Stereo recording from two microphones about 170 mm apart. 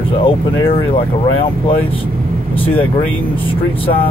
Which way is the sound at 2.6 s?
35° left (ahead or behind).